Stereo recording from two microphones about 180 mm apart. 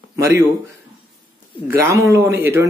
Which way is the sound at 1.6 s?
15° right (ahead or behind).